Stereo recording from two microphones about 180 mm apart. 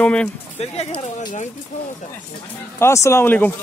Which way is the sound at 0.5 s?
35° left (ahead or behind).